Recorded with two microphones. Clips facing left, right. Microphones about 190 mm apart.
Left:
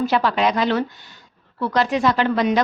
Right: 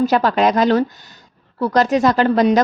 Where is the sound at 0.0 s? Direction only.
45° right (ahead or behind).